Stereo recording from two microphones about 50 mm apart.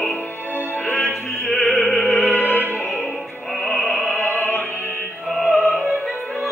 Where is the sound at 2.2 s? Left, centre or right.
Left.